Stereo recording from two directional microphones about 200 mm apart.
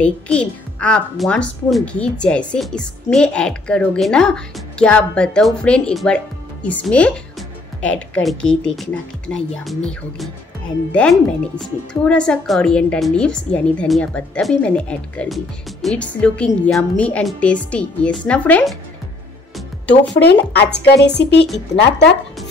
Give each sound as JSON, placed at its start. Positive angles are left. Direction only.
{"t": 0.0, "sound": "a woman's voice", "side_deg": 5}
{"t": 20.2, "sound": "speech", "side_deg": 55}